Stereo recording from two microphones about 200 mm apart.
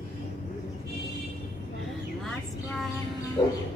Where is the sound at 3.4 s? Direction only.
20° left (ahead or behind).